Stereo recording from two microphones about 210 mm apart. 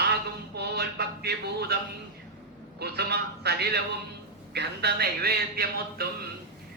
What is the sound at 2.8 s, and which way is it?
A man's voice, 50° right (ahead or behind).